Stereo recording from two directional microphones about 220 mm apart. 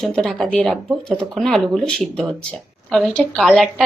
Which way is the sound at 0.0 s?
Centre (ahead or behind).